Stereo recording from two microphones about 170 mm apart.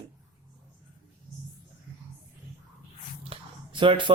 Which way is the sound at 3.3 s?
30° right (ahead or behind).